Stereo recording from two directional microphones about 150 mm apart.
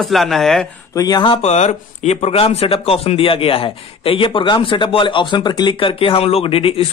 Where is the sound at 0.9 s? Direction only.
25° left (ahead or behind).